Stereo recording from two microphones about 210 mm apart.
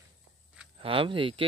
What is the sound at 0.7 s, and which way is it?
Speech, 25° right (ahead or behind).